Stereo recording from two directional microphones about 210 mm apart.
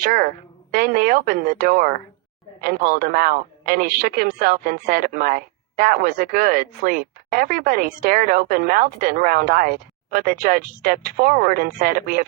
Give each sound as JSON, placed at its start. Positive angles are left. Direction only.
{"t": 0.0, "sound": "a woman's voice", "side_deg": -40}